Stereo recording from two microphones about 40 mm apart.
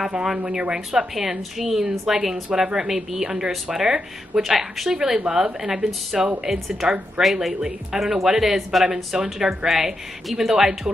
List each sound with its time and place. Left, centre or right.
0.5 s speech: right
0.7 s a woman's voice: centre